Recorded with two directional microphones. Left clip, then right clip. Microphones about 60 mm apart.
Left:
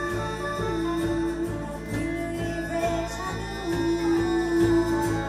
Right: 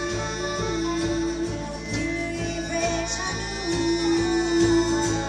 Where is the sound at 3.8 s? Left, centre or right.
Centre.